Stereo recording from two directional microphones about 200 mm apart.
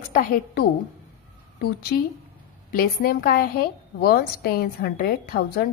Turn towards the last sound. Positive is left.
turn(degrees=50)  # may be behind; listen again after turning